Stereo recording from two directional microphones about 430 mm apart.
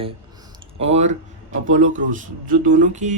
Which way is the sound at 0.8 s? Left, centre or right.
Centre.